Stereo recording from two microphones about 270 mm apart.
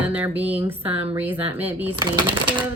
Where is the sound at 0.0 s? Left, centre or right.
Centre.